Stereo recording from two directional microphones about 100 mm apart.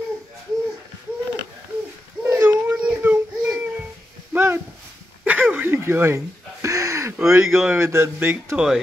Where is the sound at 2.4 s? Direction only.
15° right (ahead or behind).